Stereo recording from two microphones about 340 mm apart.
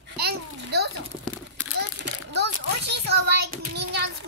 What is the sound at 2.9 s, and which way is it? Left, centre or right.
Child singing, right.